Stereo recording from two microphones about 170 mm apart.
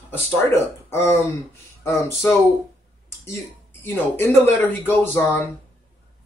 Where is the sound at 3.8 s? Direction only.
10° left (ahead or behind).